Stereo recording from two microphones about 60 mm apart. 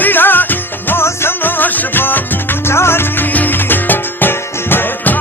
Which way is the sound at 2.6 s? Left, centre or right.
Left.